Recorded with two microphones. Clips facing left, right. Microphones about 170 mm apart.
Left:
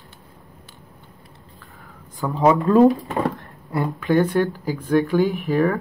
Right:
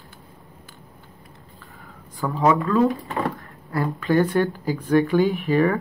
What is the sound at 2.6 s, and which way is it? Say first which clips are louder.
Speech: left 6 dB; 40° left (ahead or behind).